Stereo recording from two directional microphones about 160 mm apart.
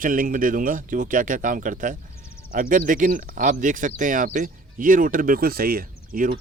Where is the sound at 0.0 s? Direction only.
60° right (ahead or behind).